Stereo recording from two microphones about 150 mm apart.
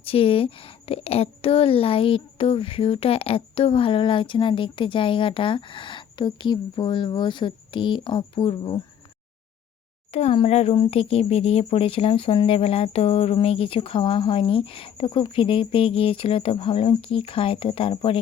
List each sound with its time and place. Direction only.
0.0 s speech: 40° left (ahead or behind)
10.1 s speech: 45° left (ahead or behind)